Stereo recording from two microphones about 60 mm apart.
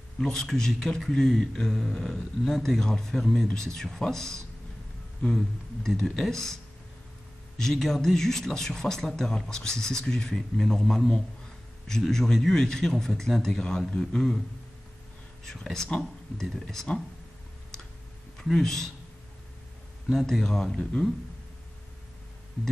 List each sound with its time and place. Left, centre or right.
0.2 s speech: centre
5.9 s speech: centre
15.4 s speech: centre
18.4 s speech: centre
20.1 s speech: centre